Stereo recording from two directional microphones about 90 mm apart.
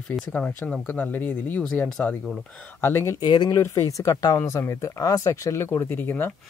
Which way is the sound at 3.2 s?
55° left (ahead or behind).